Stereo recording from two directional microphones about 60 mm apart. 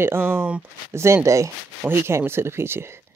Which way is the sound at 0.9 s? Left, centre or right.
Right.